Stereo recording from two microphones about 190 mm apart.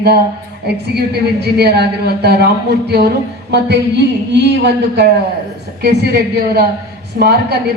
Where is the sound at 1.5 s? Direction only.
60° right (ahead or behind).